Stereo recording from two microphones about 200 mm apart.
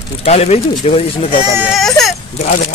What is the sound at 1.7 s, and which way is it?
Baby cry, centre (ahead or behind).